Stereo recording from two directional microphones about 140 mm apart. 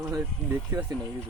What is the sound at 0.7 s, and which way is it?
Speech, 20° right (ahead or behind).